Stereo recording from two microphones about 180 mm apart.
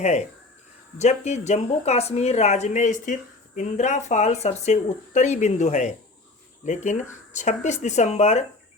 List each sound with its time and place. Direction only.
0.0 s speech: 40° left (ahead or behind)